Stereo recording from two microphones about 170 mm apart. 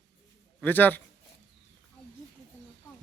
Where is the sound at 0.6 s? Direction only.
10° left (ahead or behind).